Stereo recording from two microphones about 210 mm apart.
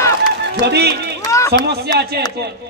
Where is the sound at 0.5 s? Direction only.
55° right (ahead or behind).